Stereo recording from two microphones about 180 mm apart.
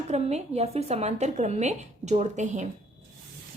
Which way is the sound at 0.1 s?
35° right (ahead or behind).